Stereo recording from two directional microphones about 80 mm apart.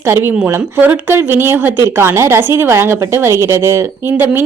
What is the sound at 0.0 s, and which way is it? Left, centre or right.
A woman's voice, right.